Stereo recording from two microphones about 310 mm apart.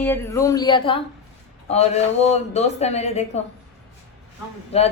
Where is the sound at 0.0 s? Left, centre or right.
Centre.